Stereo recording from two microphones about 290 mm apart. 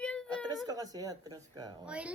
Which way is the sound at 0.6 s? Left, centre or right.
Centre.